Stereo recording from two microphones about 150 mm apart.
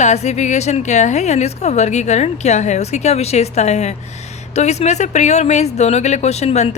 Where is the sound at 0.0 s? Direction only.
50° left (ahead or behind).